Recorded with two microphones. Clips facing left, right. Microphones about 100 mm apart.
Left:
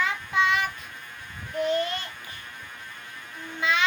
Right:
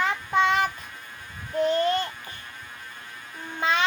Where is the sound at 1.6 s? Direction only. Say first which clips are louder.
Right 4 dB; 35° right (ahead or behind).